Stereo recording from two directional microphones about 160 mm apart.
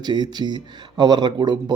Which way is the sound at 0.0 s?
25° right (ahead or behind).